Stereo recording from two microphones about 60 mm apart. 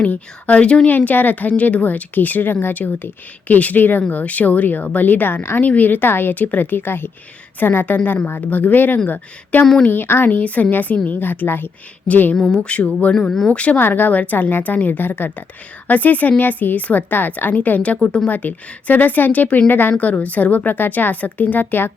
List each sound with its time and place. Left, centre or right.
0.0 s a woman's voice: left
0.9 s a woman's voice: left
12.0 s a woman's voice: left
12.4 s speech: centre
12.6 s a woman's voice: left
13.1 s speech: centre
13.5 s a woman's voice: left
13.8 s a woman's voice: left
18.0 s speech: centre
18.3 s a woman's voice: left